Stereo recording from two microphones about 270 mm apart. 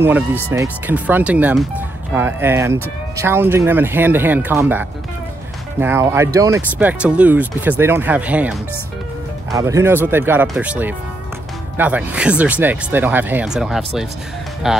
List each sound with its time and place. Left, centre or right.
0.0 s speech: centre